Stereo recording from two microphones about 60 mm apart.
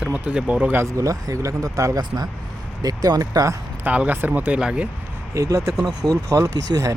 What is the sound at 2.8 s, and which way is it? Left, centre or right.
Speech, right.